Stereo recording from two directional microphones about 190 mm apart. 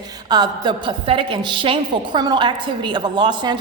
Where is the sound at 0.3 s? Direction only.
20° right (ahead or behind).